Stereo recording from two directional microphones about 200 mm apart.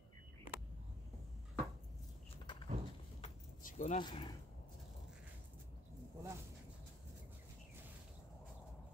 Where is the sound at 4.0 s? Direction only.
20° left (ahead or behind).